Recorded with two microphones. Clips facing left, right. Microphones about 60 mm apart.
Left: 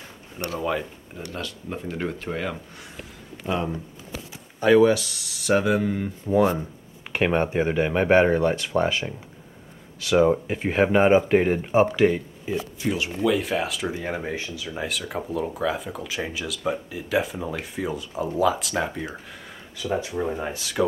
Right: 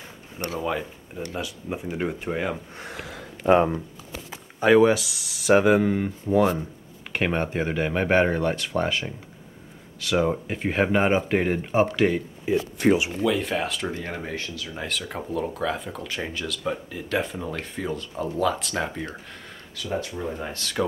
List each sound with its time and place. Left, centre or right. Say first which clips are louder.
0.6 s speech: left 1 dB; centre
3.4 s speech: right 8 dB; right
4.6 s speech: even; centre
6.2 s speech: left 1 dB; centre
12.8 s speech: right 8 dB; right
13.2 s speech: left 1 dB; centre
19.8 s speech: left 3 dB; centre